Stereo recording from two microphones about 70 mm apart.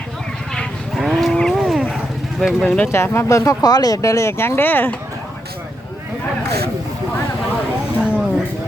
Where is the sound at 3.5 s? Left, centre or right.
Left.